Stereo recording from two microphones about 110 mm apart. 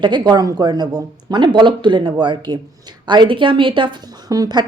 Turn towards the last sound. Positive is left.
turn(degrees=-35)  # may be behind; listen again after turning